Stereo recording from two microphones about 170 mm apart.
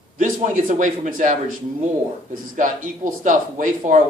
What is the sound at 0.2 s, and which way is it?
Speech, 50° right (ahead or behind).